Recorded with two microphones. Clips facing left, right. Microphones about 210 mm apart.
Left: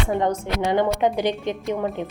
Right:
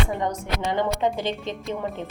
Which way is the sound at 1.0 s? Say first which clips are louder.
Left 4 dB; 20° left (ahead or behind).